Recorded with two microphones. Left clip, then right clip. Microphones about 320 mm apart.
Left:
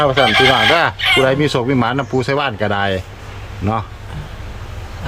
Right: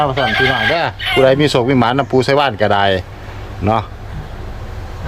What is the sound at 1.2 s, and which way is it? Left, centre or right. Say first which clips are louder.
Speech: right 4 dB; centre.